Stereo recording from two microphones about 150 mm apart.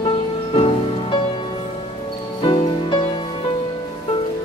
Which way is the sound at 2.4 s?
30° left (ahead or behind).